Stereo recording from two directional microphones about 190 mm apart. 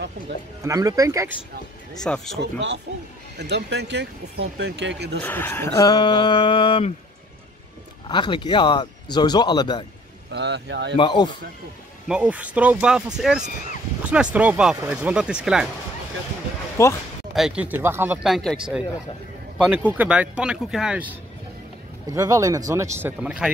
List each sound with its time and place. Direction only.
0.6 s speech: 15° right (ahead or behind)
2.0 s speech: centre (ahead or behind)
3.3 s speech: 65° right (ahead or behind)
5.2 s speech: 10° left (ahead or behind); by 6.9 s 25° left (ahead or behind)
8.1 s speech: 25° left (ahead or behind)
10.3 s speech: 65° right (ahead or behind)
11.0 s speech: 25° left (ahead or behind)
12.1 s speech: 5° right (ahead or behind)
16.8 s speech: 15° left (ahead or behind)
17.3 s speech: 5° right (ahead or behind)
19.9 s speech: 10° right (ahead or behind)
22.0 s speech: 15° right (ahead or behind)